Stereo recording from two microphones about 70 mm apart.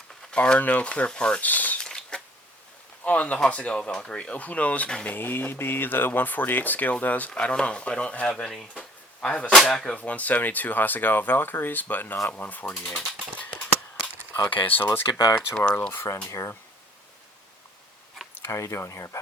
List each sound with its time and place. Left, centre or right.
0.3 s speech: centre
1.5 s speech: left
1.8 s a sound: centre
3.0 s speech: centre
5.1 s speech: left; by 8.6 s centre
8.7 s a sound: centre
9.6 s speech: centre
10.0 s speech: left
14.5 s speech: left
15.1 s speech: left
15.4 s speech: centre
15.8 s speech: left
16.3 s speech: left
18.4 s speech: left